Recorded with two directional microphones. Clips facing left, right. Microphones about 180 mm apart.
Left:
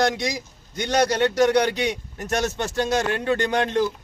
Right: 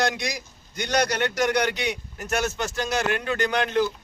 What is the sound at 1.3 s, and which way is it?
A man's voice, 30° left (ahead or behind).